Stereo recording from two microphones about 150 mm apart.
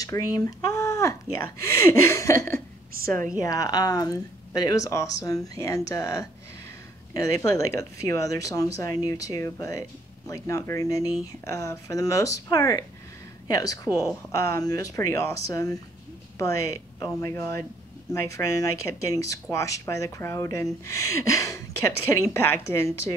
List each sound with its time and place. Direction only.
0.0 s a woman's voice: 25° left (ahead or behind)